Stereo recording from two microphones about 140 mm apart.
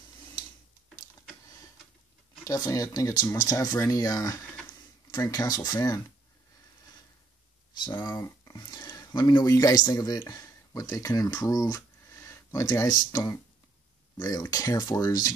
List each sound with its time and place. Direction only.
2.4 s speech: 25° left (ahead or behind)
7.8 s speech: 30° left (ahead or behind)
12.6 s speech: 30° left (ahead or behind)